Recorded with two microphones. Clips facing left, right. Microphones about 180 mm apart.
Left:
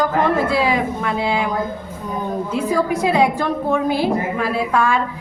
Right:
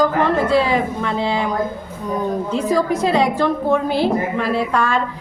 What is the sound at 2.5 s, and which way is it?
A woman's voice, 10° left (ahead or behind).